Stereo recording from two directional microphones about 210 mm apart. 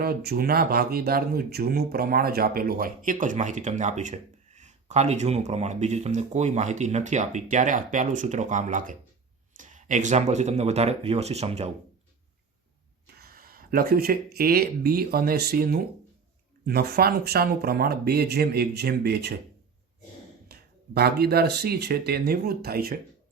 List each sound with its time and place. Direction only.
0.0 s speech: 50° right (ahead or behind); by 11.7 s 30° right (ahead or behind)
13.2 s speech: 45° right (ahead or behind)
20.5 s speech: 50° right (ahead or behind)